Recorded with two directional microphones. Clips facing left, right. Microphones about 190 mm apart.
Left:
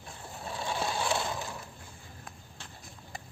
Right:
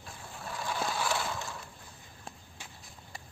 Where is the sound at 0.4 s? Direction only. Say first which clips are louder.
Left 1 dB; 25° left (ahead or behind).